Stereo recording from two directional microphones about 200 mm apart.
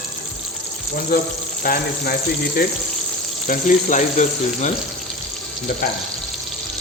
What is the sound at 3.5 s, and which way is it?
Speech, 40° left (ahead or behind).